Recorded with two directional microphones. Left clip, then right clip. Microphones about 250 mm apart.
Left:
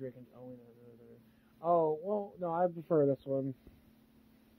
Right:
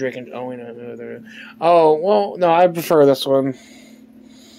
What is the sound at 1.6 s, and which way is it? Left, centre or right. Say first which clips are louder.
Speech: right 18 dB; right.